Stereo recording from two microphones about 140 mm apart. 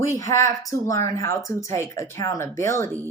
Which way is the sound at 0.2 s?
25° left (ahead or behind).